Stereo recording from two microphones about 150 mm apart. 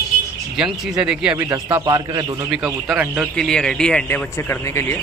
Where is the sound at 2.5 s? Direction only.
5° right (ahead or behind).